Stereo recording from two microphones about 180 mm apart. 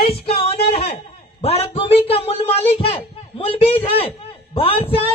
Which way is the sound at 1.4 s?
35° left (ahead or behind).